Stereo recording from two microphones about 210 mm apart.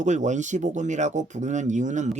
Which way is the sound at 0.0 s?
35° right (ahead or behind).